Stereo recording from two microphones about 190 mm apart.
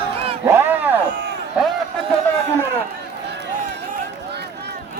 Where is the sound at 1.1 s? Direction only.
60° right (ahead or behind).